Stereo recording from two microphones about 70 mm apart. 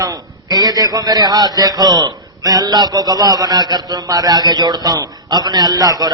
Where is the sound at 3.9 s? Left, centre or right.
Right.